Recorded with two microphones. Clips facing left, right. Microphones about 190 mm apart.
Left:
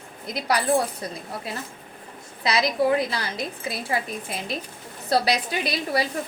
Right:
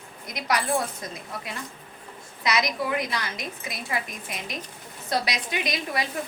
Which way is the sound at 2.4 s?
30° left (ahead or behind).